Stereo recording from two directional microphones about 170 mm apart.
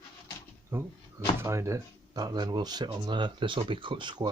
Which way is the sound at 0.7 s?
15° right (ahead or behind).